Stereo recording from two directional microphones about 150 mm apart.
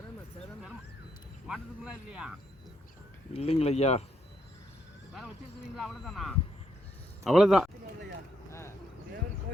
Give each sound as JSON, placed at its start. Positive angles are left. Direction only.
{"t": 1.5, "sound": "speech", "side_deg": -5}
{"t": 3.3, "sound": "speech", "side_deg": 45}
{"t": 5.7, "sound": "speech", "side_deg": 0}
{"t": 8.4, "sound": "a sound", "side_deg": 20}